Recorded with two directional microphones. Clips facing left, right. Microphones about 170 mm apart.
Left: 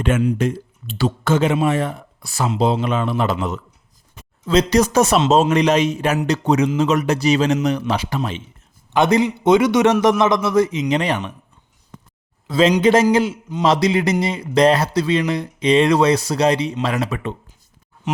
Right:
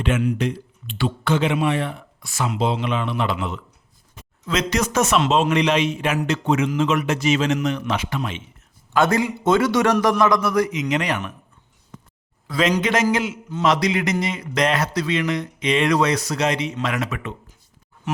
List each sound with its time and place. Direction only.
0.3 s a man's voice: 45° left (ahead or behind)
8.9 s a man's voice: 20° left (ahead or behind)
12.5 s speech: 25° left (ahead or behind)